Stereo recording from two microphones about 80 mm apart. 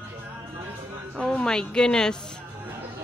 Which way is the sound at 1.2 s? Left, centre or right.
Centre.